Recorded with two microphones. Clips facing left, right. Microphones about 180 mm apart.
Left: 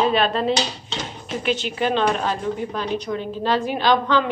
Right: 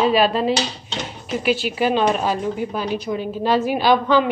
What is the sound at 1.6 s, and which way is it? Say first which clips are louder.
A woman's voice: right 1 dB; 10° right (ahead or behind).